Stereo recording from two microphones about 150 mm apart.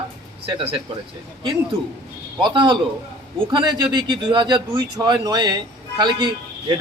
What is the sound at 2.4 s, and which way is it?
A man's voice, 30° right (ahead or behind).